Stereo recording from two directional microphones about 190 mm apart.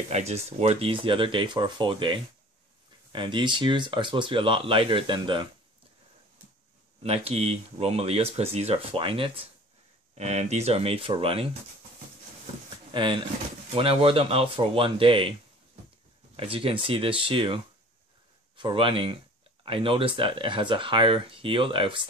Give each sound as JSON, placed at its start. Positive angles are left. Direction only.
{"t": 0.1, "sound": "speech", "side_deg": -35}
{"t": 7.0, "sound": "speech", "side_deg": -30}
{"t": 12.9, "sound": "speech", "side_deg": -25}
{"t": 16.3, "sound": "speech", "side_deg": -30}
{"t": 18.6, "sound": "speech", "side_deg": -25}